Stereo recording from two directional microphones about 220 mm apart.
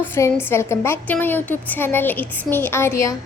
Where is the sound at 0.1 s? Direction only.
10° left (ahead or behind).